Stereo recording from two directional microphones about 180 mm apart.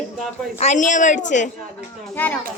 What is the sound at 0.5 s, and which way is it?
Speech, 40° left (ahead or behind).